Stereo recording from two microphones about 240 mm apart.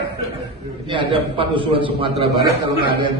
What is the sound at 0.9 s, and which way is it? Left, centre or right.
A man's voice, right.